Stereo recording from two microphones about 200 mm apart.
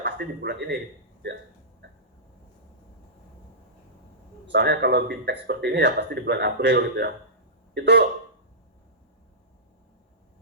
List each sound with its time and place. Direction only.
0.0 s speech: 60° right (ahead or behind)
4.5 s speech: 55° right (ahead or behind)